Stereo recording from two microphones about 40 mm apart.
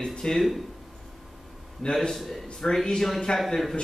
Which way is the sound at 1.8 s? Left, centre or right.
Left.